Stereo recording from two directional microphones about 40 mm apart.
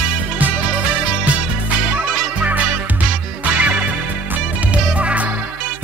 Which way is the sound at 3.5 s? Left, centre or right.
Right.